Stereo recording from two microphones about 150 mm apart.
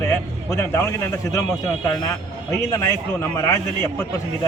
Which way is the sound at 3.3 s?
20° left (ahead or behind).